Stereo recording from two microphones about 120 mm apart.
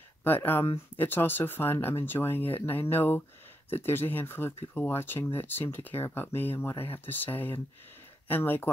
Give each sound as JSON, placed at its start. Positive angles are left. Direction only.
{"t": 0.2, "sound": "speech", "side_deg": 15}